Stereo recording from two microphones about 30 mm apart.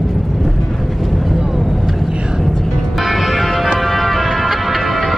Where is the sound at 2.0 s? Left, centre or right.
Right.